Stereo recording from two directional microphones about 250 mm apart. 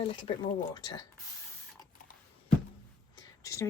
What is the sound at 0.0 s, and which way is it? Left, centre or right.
Speech, centre.